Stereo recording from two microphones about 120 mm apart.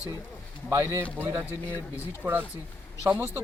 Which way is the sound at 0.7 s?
25° right (ahead or behind).